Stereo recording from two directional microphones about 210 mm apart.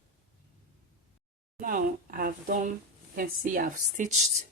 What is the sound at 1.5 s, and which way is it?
Speech, 40° right (ahead or behind).